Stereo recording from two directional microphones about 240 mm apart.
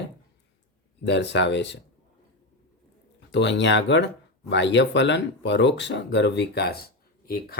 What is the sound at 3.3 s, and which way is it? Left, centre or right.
Speech, left.